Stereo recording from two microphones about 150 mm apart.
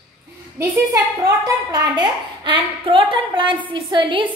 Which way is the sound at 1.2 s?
25° right (ahead or behind).